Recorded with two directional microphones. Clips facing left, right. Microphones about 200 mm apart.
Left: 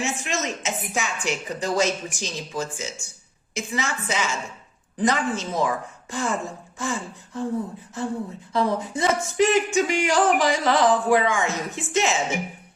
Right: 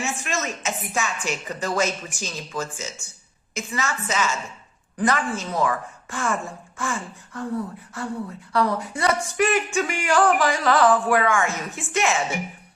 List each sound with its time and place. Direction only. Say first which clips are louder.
0.0 s a woman's voice: left 1 dB; 15° left (ahead or behind)
8.5 s a woman's voice: even; 20° left (ahead or behind)